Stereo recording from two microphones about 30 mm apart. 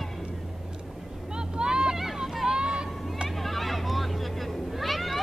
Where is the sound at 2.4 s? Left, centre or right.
Right.